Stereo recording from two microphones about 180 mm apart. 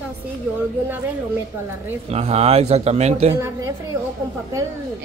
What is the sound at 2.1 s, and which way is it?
Speech, 35° right (ahead or behind).